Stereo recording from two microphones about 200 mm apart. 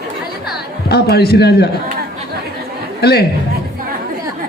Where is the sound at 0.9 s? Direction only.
55° left (ahead or behind).